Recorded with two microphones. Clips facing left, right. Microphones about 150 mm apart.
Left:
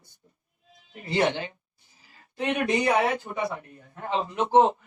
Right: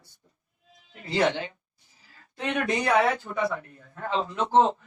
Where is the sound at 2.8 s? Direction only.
20° left (ahead or behind).